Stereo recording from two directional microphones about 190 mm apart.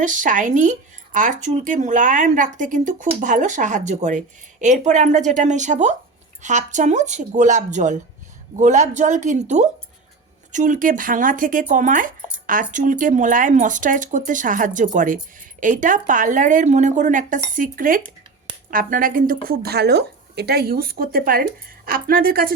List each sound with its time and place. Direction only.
0.0 s speech: 45° right (ahead or behind)